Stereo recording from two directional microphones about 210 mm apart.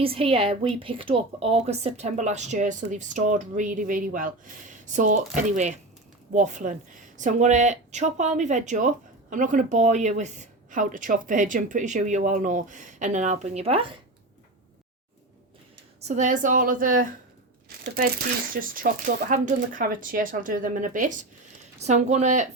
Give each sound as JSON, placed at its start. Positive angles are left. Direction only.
{"t": 0.0, "sound": "speech", "side_deg": -25}
{"t": 16.0, "sound": "speech", "side_deg": -35}
{"t": 18.5, "sound": "speech", "side_deg": -40}